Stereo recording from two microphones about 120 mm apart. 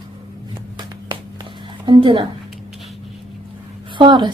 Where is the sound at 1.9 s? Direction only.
45° right (ahead or behind).